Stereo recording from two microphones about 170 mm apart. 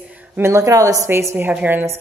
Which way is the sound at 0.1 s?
10° right (ahead or behind).